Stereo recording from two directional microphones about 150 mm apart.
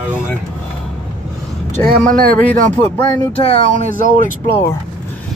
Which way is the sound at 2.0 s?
70° right (ahead or behind).